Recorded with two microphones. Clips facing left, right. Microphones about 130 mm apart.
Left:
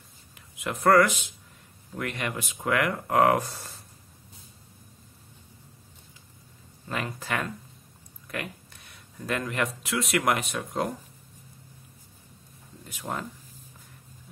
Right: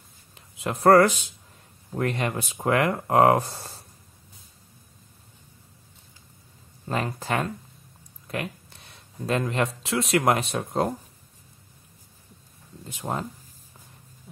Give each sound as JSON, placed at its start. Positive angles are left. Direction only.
{"t": 0.3, "sound": "a sound", "side_deg": -30}
{"t": 1.9, "sound": "speech", "side_deg": -35}
{"t": 6.9, "sound": "speech", "side_deg": -35}
{"t": 13.0, "sound": "speech", "side_deg": -35}